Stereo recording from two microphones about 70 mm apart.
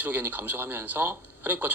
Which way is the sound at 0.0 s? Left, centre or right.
Right.